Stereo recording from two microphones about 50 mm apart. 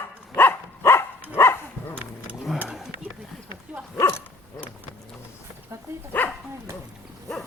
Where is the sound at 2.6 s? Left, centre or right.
Centre.